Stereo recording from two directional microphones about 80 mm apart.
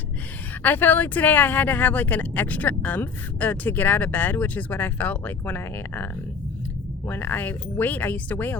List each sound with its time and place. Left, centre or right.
0.6 s speech: left
7.1 s speech: left